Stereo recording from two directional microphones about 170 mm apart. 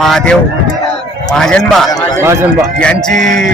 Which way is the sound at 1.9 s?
20° left (ahead or behind).